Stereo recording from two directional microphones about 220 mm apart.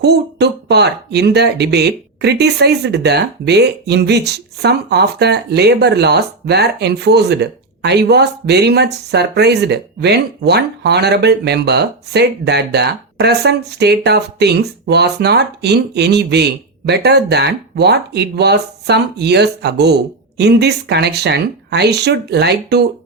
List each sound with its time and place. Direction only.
0.0 s speech: 50° right (ahead or behind)